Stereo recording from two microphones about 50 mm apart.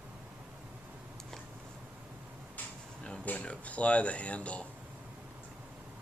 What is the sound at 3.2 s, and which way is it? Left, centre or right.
Speech, left.